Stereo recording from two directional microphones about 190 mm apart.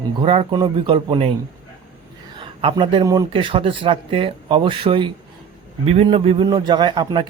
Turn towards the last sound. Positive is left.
turn(degrees=-25)  # may be behind; listen again after turning